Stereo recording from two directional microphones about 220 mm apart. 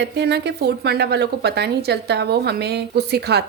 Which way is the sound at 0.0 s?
50° right (ahead or behind).